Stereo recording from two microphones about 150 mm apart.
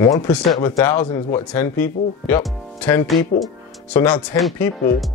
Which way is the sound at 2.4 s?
10° left (ahead or behind).